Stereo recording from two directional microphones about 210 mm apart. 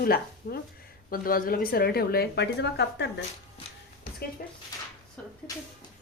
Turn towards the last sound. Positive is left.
turn(degrees=5)  # may be behind; listen again after turning